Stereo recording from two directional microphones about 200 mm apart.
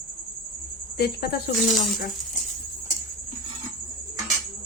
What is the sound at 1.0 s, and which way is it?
Speech, 50° left (ahead or behind).